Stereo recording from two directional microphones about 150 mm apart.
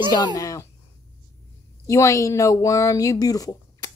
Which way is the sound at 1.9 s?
20° left (ahead or behind).